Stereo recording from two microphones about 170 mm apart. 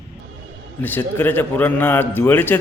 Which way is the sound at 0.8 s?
10° left (ahead or behind).